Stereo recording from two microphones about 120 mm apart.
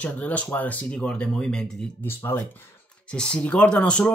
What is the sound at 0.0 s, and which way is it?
Speech, 10° left (ahead or behind).